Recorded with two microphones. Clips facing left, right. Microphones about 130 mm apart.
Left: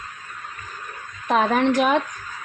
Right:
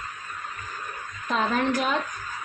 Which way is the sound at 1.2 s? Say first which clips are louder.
Left 6 dB; 65° left (ahead or behind).